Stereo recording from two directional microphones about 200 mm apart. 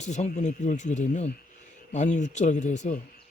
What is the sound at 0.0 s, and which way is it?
Speech, 35° left (ahead or behind).